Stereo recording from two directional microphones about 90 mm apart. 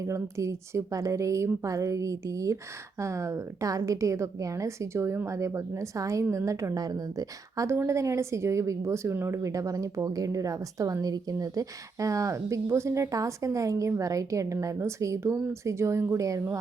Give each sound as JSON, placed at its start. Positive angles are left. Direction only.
{"t": 0.0, "sound": "a woman's voice", "side_deg": -35}